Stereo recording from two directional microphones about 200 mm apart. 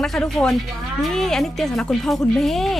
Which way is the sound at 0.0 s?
5° left (ahead or behind).